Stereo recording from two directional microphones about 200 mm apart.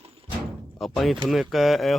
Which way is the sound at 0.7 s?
Centre (ahead or behind).